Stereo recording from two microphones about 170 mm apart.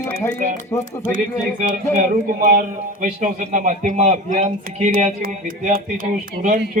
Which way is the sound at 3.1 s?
45° right (ahead or behind).